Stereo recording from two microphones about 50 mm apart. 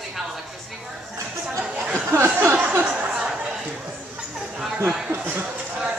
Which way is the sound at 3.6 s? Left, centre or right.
Right.